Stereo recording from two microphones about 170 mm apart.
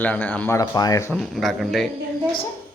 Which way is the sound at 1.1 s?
Centre (ahead or behind).